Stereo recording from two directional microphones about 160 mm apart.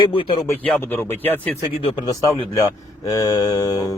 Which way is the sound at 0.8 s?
10° left (ahead or behind).